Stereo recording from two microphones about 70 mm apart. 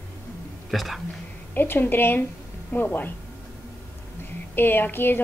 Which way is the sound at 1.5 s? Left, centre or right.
Left.